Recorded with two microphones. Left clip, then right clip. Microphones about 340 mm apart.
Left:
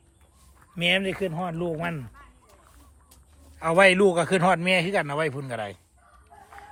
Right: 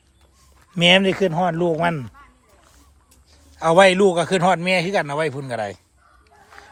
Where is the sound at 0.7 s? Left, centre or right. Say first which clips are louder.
Right 9 dB; centre.